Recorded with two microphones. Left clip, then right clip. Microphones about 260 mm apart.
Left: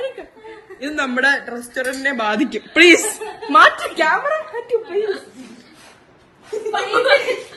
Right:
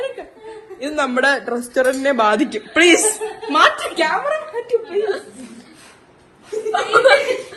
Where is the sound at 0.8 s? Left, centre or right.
Centre.